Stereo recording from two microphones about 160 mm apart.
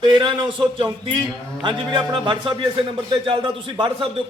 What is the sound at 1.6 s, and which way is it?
A man's voice, 30° right (ahead or behind).